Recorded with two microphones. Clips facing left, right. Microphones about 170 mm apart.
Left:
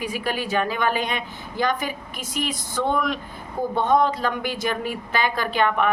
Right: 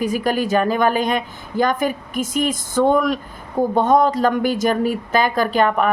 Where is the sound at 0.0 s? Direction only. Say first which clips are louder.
Right 7 dB; 45° right (ahead or behind).